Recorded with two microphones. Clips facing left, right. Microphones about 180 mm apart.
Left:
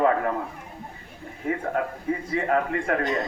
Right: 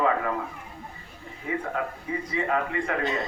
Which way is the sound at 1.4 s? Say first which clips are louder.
Left 3 dB; 50° left (ahead or behind).